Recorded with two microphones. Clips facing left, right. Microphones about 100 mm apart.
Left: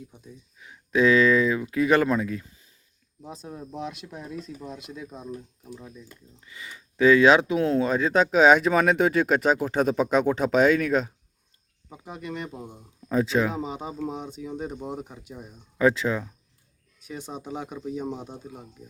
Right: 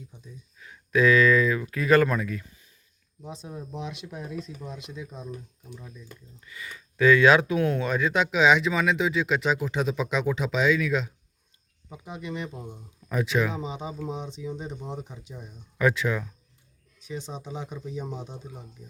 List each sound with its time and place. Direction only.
0.6 s speech: 20° left (ahead or behind)
3.2 s speech: centre (ahead or behind)
6.4 s speech: 25° left (ahead or behind); by 11.1 s 45° left (ahead or behind)
11.9 s speech: centre (ahead or behind)
12.5 s speech: 10° left (ahead or behind)
13.1 s speech: 30° left (ahead or behind)
13.5 s speech: 5° left (ahead or behind)
15.8 s speech: 30° left (ahead or behind)
17.3 s speech: 15° left (ahead or behind)